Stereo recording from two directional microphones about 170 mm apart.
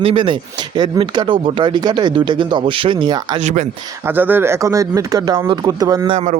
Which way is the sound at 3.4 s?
45° right (ahead or behind).